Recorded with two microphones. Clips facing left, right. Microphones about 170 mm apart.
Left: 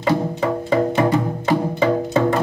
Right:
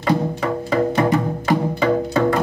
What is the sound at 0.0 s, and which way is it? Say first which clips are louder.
Music: left 1 dB; 20° left (ahead or behind).